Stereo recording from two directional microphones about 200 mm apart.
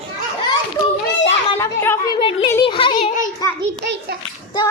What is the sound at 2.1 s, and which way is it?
Speech, 25° left (ahead or behind).